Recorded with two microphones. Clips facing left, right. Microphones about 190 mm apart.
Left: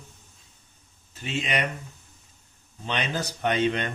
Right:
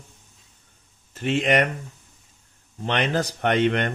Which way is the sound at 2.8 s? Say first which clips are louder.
Right 6 dB; 70° right (ahead or behind).